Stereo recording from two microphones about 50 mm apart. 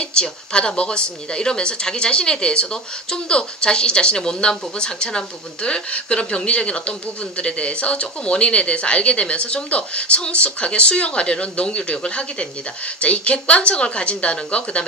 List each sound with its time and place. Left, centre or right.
0.0 s a woman's voice: centre